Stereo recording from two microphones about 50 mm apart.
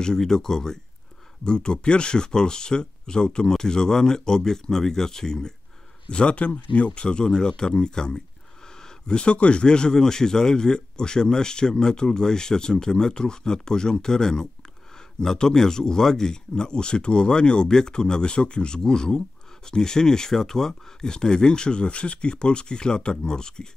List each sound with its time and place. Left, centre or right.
0.0 s speech: centre
6.0 s speech: left